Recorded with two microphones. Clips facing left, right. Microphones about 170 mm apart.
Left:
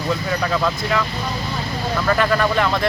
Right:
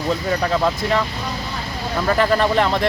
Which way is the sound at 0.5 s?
30° right (ahead or behind).